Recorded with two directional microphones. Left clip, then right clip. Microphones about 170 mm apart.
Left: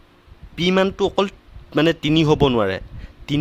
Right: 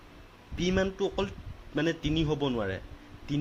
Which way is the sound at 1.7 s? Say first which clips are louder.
Left 12 dB; 50° left (ahead or behind).